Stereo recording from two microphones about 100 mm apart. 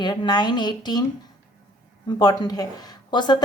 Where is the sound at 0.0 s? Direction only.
50° left (ahead or behind).